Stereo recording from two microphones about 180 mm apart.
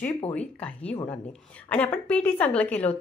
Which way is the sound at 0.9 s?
25° left (ahead or behind).